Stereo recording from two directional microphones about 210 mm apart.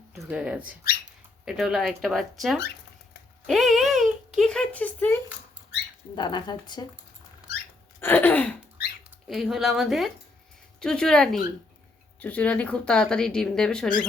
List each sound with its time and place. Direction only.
0.1 s speech: 5° right (ahead or behind)
3.4 s a sound: centre (ahead or behind)
3.9 s a sound: 35° right (ahead or behind)
4.4 s speech: 5° left (ahead or behind)
6.1 s speech: 20° left (ahead or behind)
8.0 s speech: 10° left (ahead or behind)